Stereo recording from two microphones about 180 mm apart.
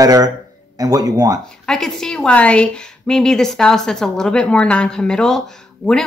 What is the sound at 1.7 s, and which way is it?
A woman's voice, 5° left (ahead or behind).